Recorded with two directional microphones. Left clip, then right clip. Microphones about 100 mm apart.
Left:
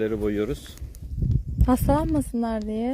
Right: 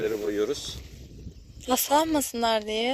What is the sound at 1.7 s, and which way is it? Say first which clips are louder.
Speech: even; 10° left (ahead or behind).